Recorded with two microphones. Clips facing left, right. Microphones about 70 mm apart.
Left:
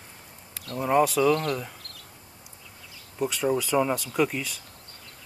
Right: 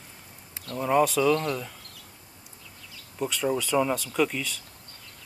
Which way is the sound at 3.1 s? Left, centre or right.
Centre.